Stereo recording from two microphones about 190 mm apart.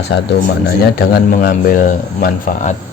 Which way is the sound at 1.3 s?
50° left (ahead or behind).